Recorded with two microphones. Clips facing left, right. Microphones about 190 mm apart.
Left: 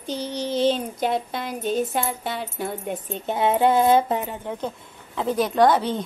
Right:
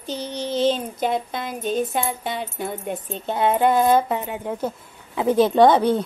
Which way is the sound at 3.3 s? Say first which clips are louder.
Right 1 dB; 20° left (ahead or behind).